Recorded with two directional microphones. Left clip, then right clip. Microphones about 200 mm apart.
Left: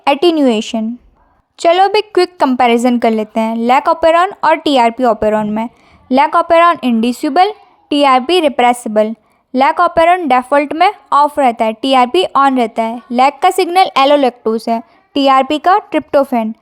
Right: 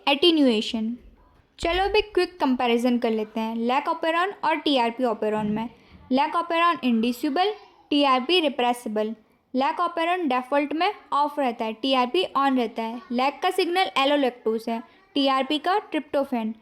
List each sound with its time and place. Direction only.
0.0 s a woman's voice: 35° left (ahead or behind)